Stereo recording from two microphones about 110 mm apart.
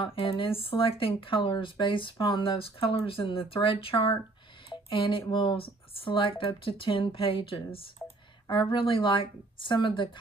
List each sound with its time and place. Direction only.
0.0 s speech: 55° left (ahead or behind)
4.6 s a sound: 50° left (ahead or behind)
5.3 s speech: 50° left (ahead or behind)